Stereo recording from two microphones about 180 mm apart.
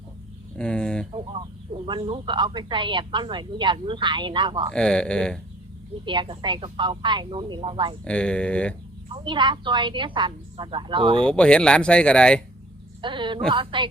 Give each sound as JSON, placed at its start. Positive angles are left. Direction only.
{"t": 0.5, "sound": "speech", "side_deg": 5}
{"t": 1.1, "sound": "a woman's voice", "side_deg": -30}
{"t": 4.7, "sound": "speech", "side_deg": 5}
{"t": 6.1, "sound": "a woman's voice", "side_deg": -25}
{"t": 8.0, "sound": "speech", "side_deg": 5}
{"t": 9.1, "sound": "a woman's voice", "side_deg": -25}
{"t": 11.2, "sound": "speech", "side_deg": 5}
{"t": 13.0, "sound": "a woman's voice", "side_deg": -25}